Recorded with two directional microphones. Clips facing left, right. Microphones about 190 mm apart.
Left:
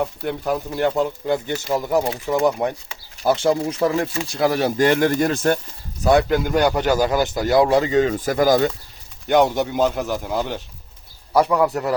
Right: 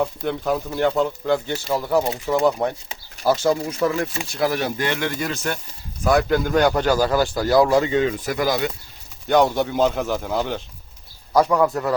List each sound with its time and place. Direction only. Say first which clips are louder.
0.0 s speech: right 1 dB; 5° left (ahead or behind)
3.2 s speech: left 1 dB; 25° left (ahead or behind); by 5.5 s 45° left (ahead or behind)
6.0 s speech: left 2 dB; 30° left (ahead or behind)
6.3 s speech: even; 15° left (ahead or behind); by 8.7 s 45° left (ahead or behind)
9.2 s speech: left 1 dB; 15° left (ahead or behind)